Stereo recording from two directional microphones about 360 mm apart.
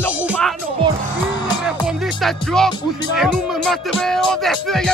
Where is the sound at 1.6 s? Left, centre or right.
Centre.